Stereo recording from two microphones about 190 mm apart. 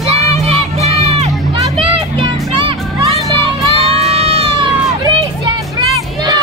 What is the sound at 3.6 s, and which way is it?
Music, 30° right (ahead or behind).